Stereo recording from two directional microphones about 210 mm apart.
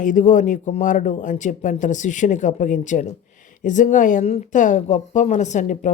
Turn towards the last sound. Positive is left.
turn(degrees=35)  # may be behind; listen again after turning